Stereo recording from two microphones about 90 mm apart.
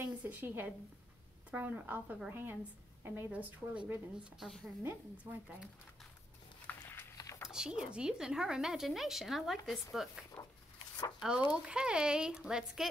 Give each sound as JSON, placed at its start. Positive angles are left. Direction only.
{"t": 0.0, "sound": "a woman's voice", "side_deg": -20}
{"t": 6.7, "sound": "a sound", "side_deg": 20}
{"t": 7.2, "sound": "a sound", "side_deg": 35}
{"t": 7.4, "sound": "speech", "side_deg": -10}
{"t": 10.4, "sound": "dog", "side_deg": 40}
{"t": 11.1, "sound": "speech", "side_deg": -10}